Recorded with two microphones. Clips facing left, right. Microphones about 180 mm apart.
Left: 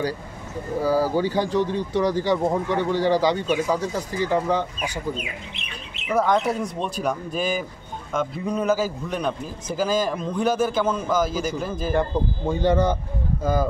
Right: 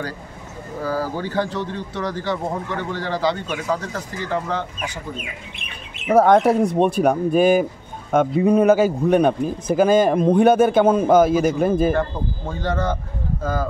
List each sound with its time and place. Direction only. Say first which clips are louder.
0.8 s a man's voice: left 3 dB; 10° left (ahead or behind)
5.6 s a man's voice: even; 50° right (ahead or behind)
11.9 s a man's voice: even; 15° left (ahead or behind)